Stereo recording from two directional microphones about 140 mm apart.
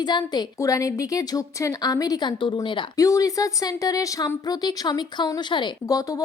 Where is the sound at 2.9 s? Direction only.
25° left (ahead or behind).